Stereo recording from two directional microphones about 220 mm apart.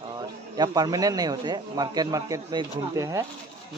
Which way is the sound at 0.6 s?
15° right (ahead or behind).